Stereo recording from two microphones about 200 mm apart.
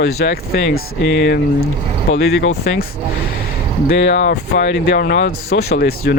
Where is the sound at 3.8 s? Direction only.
60° left (ahead or behind).